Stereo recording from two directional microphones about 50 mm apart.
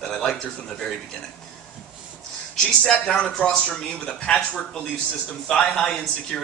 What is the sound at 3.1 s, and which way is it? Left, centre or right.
Speech, left.